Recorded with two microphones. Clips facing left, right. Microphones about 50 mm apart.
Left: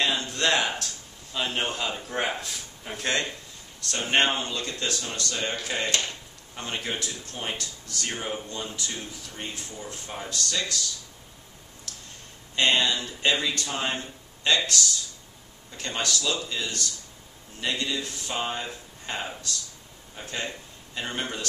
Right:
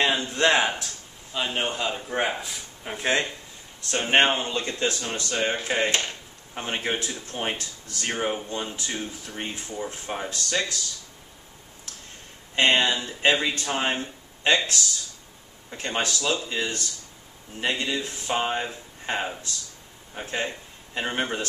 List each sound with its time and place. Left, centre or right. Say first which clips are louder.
0.0 s speech: right 4 dB; centre
1.3 s speech: right 1 dB; centre; by 10.8 s right
11.9 s a sound: even; right
12.5 s speech: right 2 dB; right
15.7 s speech: right 2 dB; right